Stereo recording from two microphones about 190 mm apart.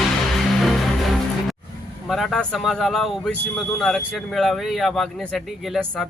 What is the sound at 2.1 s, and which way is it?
Speech, centre (ahead or behind).